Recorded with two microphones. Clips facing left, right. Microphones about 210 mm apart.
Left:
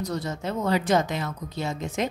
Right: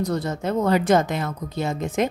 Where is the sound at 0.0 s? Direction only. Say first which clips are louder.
Right 5 dB; 55° right (ahead or behind).